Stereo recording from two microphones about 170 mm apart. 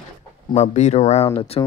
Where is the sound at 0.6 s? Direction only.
40° left (ahead or behind).